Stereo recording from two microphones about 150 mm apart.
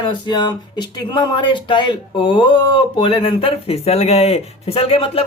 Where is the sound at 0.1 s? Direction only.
30° left (ahead or behind).